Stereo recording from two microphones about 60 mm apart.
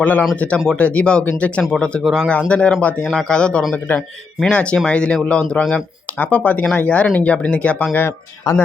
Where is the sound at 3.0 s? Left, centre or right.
Centre.